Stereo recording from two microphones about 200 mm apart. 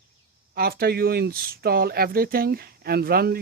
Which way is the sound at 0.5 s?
50° right (ahead or behind).